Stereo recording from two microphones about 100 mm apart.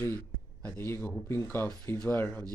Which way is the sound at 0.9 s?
25° left (ahead or behind).